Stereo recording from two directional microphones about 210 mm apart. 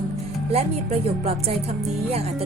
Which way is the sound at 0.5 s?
30° right (ahead or behind).